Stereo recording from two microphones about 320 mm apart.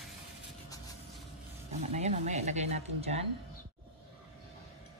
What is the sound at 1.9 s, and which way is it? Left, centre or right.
Speech, right.